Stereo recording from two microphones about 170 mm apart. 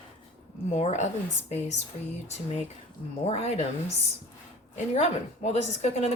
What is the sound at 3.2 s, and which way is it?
Speech, 35° left (ahead or behind).